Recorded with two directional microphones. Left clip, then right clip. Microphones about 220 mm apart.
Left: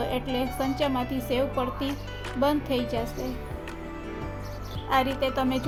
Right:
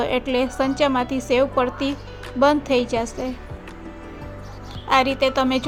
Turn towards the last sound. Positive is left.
turn(degrees=-25)  # may be behind; listen again after turning